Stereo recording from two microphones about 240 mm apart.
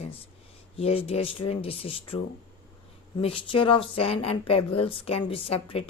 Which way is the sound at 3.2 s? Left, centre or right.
Left.